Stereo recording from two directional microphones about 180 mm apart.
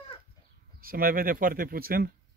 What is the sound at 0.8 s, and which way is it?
Speech, 55° right (ahead or behind).